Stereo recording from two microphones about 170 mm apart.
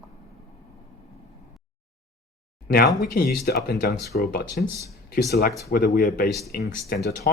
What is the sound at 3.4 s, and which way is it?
Speech, 65° left (ahead or behind).